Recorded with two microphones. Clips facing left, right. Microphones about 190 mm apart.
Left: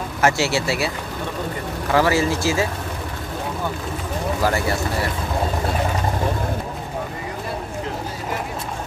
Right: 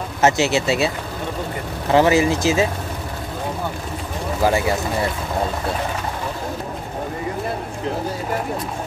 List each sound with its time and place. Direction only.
0.2 s speech: 20° right (ahead or behind)
4.4 s speech: 15° right (ahead or behind)